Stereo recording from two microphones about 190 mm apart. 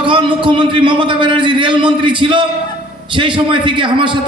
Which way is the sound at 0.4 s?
25° right (ahead or behind).